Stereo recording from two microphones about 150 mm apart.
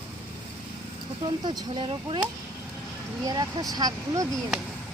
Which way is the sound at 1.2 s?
30° right (ahead or behind).